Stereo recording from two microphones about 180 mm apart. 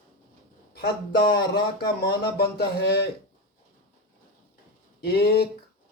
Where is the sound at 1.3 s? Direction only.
60° left (ahead or behind).